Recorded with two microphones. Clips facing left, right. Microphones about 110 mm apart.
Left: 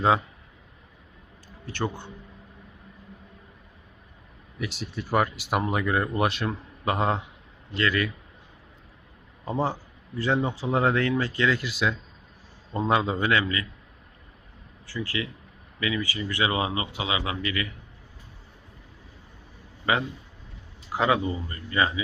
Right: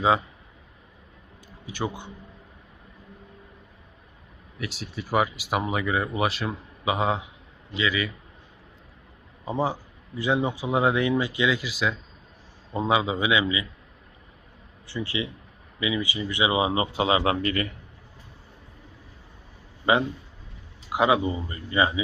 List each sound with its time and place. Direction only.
1.6 s speech: 10° right (ahead or behind)
4.5 s speech: centre (ahead or behind)
9.4 s a man's voice: 5° right (ahead or behind)
14.8 s speech: 20° right (ahead or behind)
16.7 s a man's voice: 35° right (ahead or behind)
19.8 s a man's voice: 20° right (ahead or behind)